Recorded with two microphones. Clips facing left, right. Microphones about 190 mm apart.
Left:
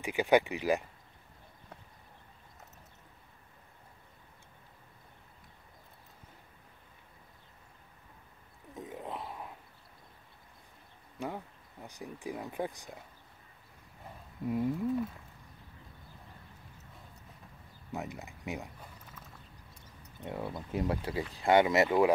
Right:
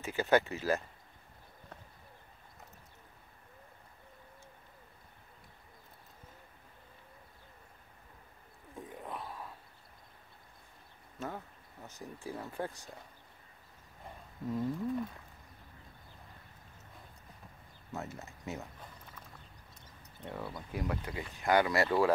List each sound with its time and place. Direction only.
0.0 s speech: 15° left (ahead or behind)
8.7 s a sound: 20° left (ahead or behind)
11.1 s speech: 15° left (ahead or behind)
14.4 s speech: 10° left (ahead or behind)
17.9 s speech: 15° left (ahead or behind)
20.2 s speech: 20° left (ahead or behind)